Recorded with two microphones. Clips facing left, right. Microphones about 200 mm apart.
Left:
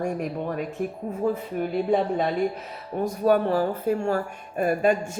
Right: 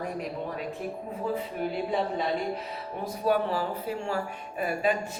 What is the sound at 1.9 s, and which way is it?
Speech, 50° left (ahead or behind).